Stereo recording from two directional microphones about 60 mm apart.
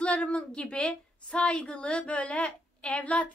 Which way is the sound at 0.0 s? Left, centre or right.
Left.